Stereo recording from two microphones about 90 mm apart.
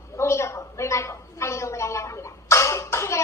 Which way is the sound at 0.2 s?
30° left (ahead or behind).